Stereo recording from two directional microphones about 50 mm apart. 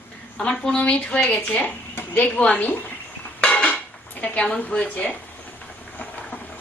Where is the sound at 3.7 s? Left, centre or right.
Left.